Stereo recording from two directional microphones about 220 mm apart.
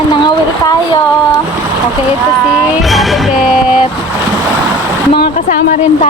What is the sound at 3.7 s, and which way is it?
Vehicle, 25° left (ahead or behind).